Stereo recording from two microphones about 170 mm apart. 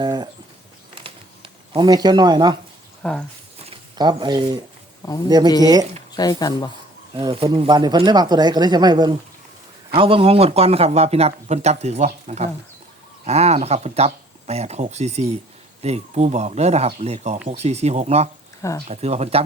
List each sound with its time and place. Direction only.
0.0 s a sound: 25° right (ahead or behind)
3.0 s speech: 5° left (ahead or behind)
3.6 s speech: 30° right (ahead or behind)
5.5 s speech: 20° left (ahead or behind)
7.1 s speech: 30° right (ahead or behind)